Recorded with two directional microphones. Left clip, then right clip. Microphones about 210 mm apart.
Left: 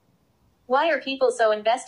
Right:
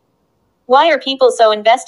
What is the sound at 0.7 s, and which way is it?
A woman's voice, 35° right (ahead or behind).